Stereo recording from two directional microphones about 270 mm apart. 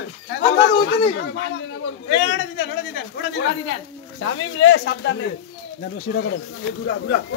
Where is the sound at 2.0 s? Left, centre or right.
Left.